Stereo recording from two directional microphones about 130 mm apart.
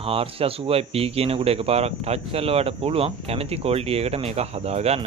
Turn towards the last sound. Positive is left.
turn(degrees=-55)  # may be behind; listen again after turning